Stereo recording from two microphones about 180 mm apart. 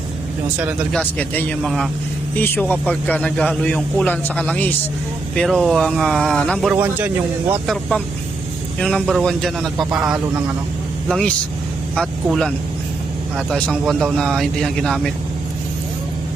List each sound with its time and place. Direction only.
0.9 s a man's voice: 10° left (ahead or behind)